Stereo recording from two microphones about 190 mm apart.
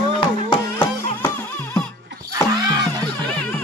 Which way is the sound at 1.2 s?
10° left (ahead or behind).